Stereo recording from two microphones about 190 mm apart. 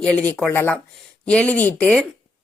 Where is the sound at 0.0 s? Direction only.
5° left (ahead or behind).